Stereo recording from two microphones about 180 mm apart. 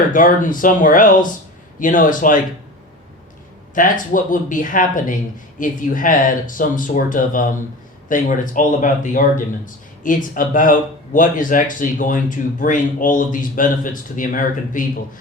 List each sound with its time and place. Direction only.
0.1 s speech: 45° left (ahead or behind)
3.8 s speech: 50° left (ahead or behind)